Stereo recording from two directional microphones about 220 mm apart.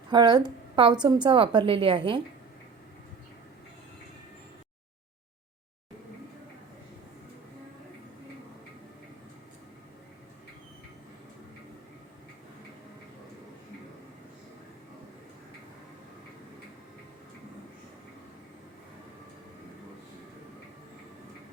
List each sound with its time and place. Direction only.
0.1 s a woman's voice: 20° right (ahead or behind)